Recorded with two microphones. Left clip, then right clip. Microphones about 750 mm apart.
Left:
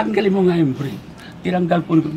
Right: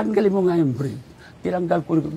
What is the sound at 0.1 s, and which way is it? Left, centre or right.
A man's voice, right.